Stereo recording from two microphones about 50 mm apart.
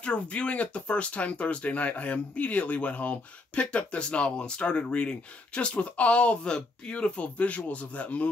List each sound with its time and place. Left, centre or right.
0.0 s speech: left